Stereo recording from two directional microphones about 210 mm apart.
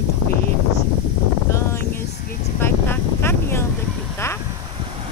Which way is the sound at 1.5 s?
15° left (ahead or behind).